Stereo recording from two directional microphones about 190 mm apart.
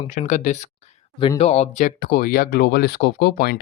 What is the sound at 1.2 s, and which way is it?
Speech, 30° left (ahead or behind).